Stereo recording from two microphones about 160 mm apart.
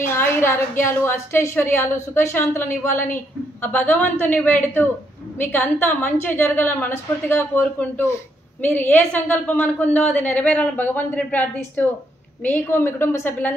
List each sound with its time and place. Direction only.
0.0 s a woman's voice: 15° left (ahead or behind)